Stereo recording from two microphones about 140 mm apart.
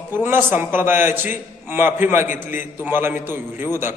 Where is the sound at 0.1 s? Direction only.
15° right (ahead or behind).